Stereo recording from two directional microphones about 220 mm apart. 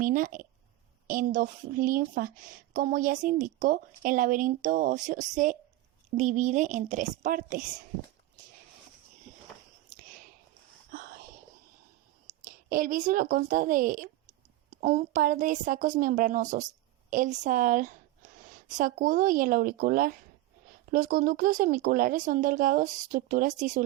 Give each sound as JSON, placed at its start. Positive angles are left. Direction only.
{"t": 0.0, "sound": "a woman's voice", "side_deg": -40}
{"t": 10.9, "sound": "whispering", "side_deg": -40}
{"t": 12.5, "sound": "a woman's voice", "side_deg": -40}